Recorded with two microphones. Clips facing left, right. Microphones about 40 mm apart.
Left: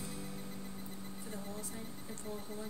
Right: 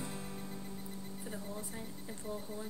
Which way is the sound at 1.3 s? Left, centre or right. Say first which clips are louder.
Right 1 dB; centre.